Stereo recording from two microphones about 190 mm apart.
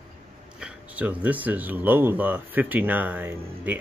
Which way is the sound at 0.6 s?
5° right (ahead or behind).